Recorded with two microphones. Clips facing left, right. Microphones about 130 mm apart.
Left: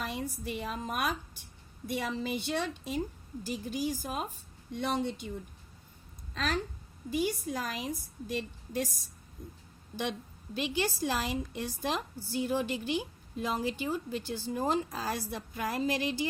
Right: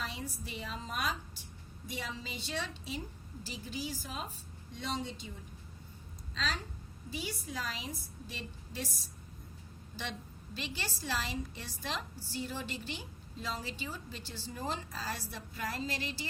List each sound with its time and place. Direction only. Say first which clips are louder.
0.0 s a woman's voice: left 5 dB; 50° left (ahead or behind)
6.3 s a woman's voice: left 6 dB; 55° left (ahead or behind)
10.0 s a woman's voice: left 7 dB; 50° left (ahead or behind)